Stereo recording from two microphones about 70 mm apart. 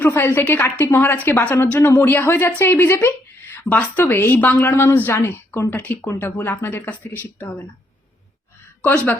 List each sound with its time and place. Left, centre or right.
0.0 s a woman's voice: left
3.7 s a woman's voice: left
4.7 s speech: left
5.7 s a woman's voice: centre
8.8 s speech: left